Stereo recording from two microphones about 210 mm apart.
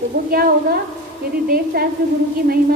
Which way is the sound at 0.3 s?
45° right (ahead or behind).